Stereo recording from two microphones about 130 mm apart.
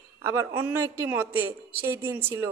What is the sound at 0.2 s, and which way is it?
A woman's voice, 20° right (ahead or behind).